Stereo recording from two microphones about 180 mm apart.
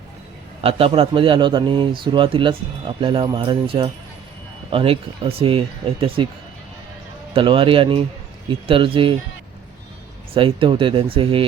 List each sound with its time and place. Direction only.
0.6 s a man's voice: 30° right (ahead or behind)
7.3 s a man's voice: 30° right (ahead or behind)
10.3 s a man's voice: 30° right (ahead or behind)